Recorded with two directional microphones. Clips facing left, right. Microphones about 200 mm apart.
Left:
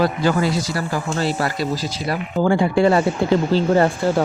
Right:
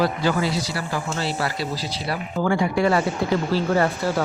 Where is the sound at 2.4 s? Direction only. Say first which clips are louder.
Left 4 dB; 30° left (ahead or behind).